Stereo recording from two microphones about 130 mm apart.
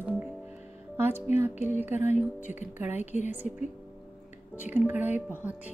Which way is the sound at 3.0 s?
60° left (ahead or behind).